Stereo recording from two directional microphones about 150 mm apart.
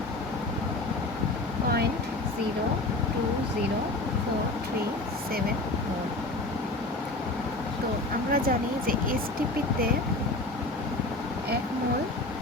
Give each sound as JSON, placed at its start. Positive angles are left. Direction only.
{"t": 8.3, "sound": "speech", "side_deg": -70}